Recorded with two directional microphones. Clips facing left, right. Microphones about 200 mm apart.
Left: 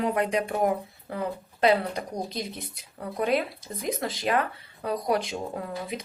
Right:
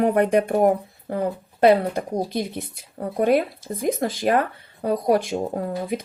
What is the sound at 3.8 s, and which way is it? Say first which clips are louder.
Speech: right 7 dB; 50° right (ahead or behind).